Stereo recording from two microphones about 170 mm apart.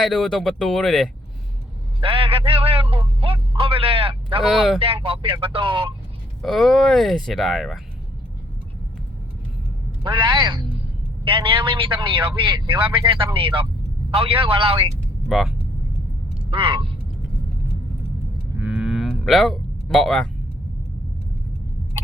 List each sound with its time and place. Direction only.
0.0 s speech: centre (ahead or behind)
2.0 s speech: 30° right (ahead or behind)
4.4 s speech: centre (ahead or behind)
4.8 s speech: 35° right (ahead or behind)
6.4 s speech: centre (ahead or behind)
10.0 s a man's voice: 30° right (ahead or behind)
15.3 s speech: centre (ahead or behind)
16.5 s a man's voice: 30° right (ahead or behind)
18.6 s a sound: 5° right (ahead or behind)